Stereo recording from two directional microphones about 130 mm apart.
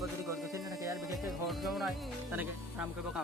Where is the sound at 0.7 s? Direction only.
25° right (ahead or behind).